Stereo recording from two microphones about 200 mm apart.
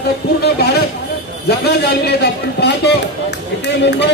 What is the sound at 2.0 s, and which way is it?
Speech, 55° left (ahead or behind).